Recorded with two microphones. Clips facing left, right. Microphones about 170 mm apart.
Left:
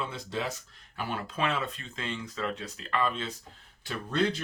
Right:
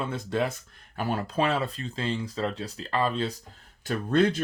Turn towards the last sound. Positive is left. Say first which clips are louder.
# right 6 dB
turn(degrees=-50)  # may be behind; listen again after turning